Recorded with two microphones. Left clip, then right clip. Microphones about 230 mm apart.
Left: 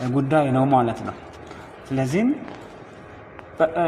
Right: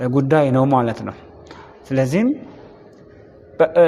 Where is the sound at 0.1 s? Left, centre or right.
Right.